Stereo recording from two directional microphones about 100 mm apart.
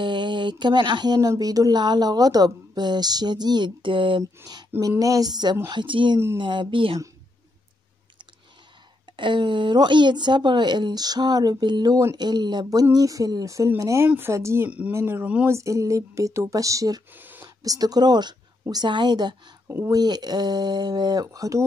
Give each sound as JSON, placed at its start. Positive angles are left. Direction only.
{"t": 0.0, "sound": "mantra", "side_deg": -50}
{"t": 1.4, "sound": "a woman's voice", "side_deg": -40}
{"t": 4.5, "sound": "a woman's voice", "side_deg": -40}
{"t": 9.1, "sound": "a woman's voice", "side_deg": -55}
{"t": 17.1, "sound": "a sound", "side_deg": -20}
{"t": 17.6, "sound": "a woman's voice", "side_deg": -40}